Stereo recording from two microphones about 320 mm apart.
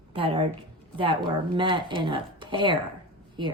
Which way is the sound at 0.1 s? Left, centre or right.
Centre.